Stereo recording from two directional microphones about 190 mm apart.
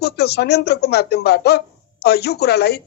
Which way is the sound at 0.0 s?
60° left (ahead or behind).